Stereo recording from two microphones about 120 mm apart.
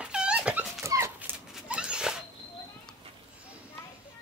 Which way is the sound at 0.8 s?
25° right (ahead or behind).